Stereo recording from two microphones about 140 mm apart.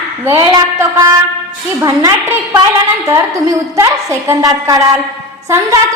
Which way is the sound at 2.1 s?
15° right (ahead or behind).